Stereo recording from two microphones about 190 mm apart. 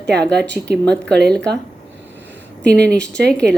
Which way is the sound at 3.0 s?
65° right (ahead or behind).